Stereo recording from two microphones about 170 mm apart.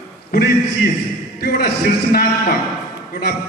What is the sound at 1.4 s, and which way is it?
Speech, 65° left (ahead or behind).